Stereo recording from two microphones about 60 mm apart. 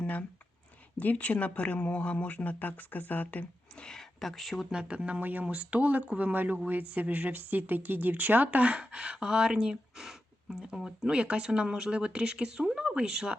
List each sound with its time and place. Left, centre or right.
0.0 s a sound: left
0.9 s speech: left
3.8 s speech: centre
4.2 s speech: centre
4.7 s speech: centre
5.2 s speech: right; by 13.3 s centre